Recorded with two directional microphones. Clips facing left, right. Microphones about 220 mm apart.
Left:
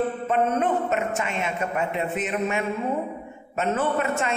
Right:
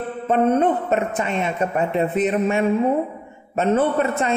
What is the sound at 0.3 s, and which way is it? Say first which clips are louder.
A man's voice: right 7 dB; 35° right (ahead or behind).